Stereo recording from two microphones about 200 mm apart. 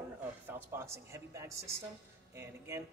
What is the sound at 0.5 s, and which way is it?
A woman's voice, 15° right (ahead or behind).